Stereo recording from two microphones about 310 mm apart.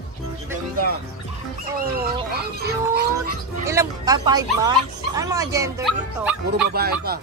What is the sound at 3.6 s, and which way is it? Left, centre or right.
Speech, centre.